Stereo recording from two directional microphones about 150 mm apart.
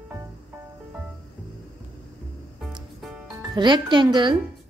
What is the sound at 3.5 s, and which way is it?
Speech, 30° right (ahead or behind).